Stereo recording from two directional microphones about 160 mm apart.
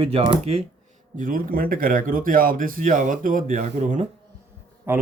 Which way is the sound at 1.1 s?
60° right (ahead or behind).